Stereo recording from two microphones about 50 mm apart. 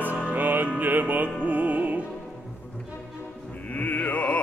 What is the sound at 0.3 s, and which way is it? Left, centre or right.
Music, right.